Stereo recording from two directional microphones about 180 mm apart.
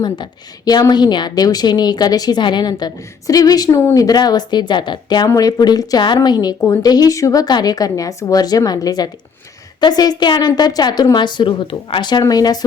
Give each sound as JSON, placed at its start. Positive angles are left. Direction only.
{"t": 0.0, "sound": "a woman's voice", "side_deg": 25}